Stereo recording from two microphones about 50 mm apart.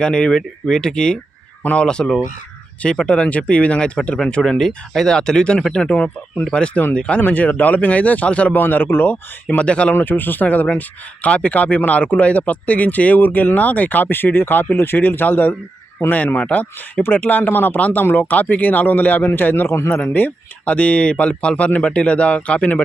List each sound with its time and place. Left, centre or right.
0.0 s speech: centre
7.2 s speech: left
8.5 s speech: left
9.6 s speech: left
9.9 s speech: left
20.1 s speech: left